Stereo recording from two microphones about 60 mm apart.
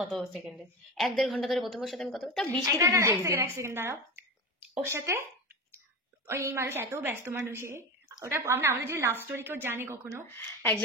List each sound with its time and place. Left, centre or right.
0.0 s a woman's voice: centre
2.6 s a woman's voice: right
9.1 s a woman's voice: right
10.2 s speech: left